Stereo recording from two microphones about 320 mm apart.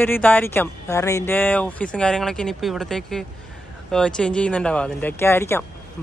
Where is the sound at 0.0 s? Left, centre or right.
Centre.